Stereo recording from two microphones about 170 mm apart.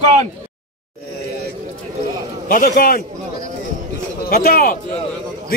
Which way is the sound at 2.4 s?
55° left (ahead or behind).